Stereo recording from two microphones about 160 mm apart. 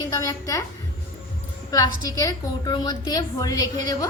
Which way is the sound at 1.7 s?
20° left (ahead or behind).